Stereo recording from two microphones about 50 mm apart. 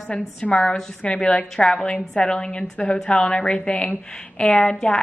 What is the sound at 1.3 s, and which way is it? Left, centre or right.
A woman's voice, centre.